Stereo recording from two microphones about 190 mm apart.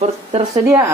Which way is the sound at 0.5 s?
15° right (ahead or behind).